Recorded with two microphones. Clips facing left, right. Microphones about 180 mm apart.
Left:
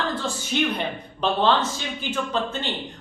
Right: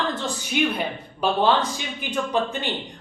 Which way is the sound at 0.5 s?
10° right (ahead or behind).